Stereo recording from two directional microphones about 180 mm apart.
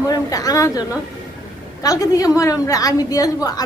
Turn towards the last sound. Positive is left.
turn(degrees=20)  # may be behind; listen again after turning